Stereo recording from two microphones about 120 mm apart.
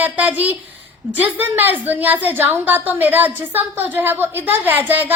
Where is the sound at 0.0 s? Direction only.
15° right (ahead or behind).